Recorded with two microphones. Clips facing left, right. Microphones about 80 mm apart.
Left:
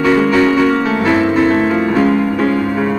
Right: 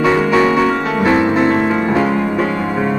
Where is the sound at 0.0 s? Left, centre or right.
Centre.